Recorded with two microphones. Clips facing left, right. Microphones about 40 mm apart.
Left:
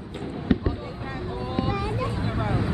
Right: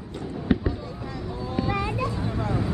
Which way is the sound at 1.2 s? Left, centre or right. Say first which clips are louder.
Even; left.